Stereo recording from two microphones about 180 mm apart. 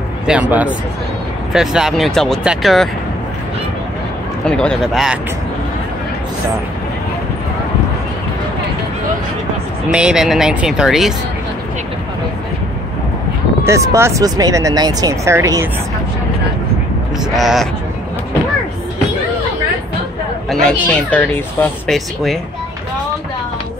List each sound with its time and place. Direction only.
0.3 s speech: 10° right (ahead or behind)
4.5 s speech: 5° left (ahead or behind)
9.8 s speech: 5° right (ahead or behind)
13.7 s speech: 15° right (ahead or behind)
17.4 s speech: centre (ahead or behind)
20.4 s speech: 5° left (ahead or behind)